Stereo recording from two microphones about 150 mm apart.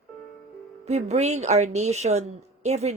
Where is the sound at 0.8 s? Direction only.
45° right (ahead or behind).